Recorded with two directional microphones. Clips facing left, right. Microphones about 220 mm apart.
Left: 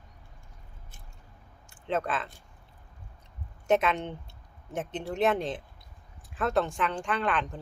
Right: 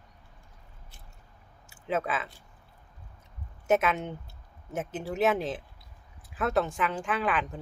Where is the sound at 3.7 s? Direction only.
5° right (ahead or behind).